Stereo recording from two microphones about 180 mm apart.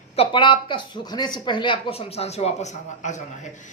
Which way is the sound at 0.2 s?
25° left (ahead or behind).